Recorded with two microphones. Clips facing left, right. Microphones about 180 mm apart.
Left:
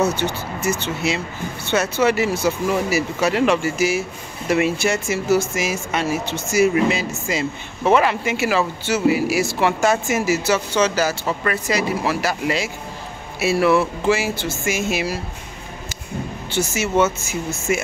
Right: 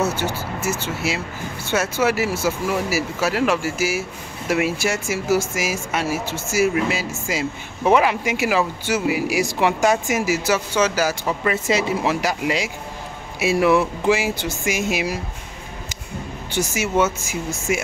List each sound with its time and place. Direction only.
0.0 s speech: 5° right (ahead or behind)
11.5 s speech: 25° right (ahead or behind)
16.5 s speech: 10° right (ahead or behind)